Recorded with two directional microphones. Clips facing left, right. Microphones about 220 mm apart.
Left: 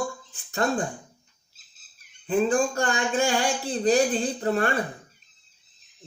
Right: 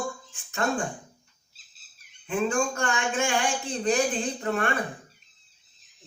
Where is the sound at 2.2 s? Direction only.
35° left (ahead or behind).